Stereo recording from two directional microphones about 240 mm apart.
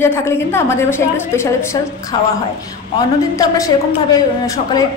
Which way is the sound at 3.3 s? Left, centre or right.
Centre.